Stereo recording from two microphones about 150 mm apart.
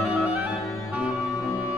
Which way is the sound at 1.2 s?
20° left (ahead or behind).